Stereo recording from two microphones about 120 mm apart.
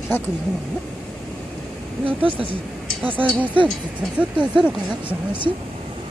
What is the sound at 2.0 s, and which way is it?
Speech, 50° right (ahead or behind).